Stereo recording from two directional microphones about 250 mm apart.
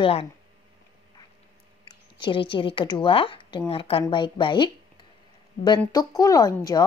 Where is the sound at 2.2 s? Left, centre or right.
Centre.